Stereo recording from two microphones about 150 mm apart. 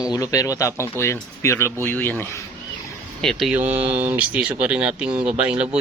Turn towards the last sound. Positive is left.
turn(degrees=-10)  # may be behind; listen again after turning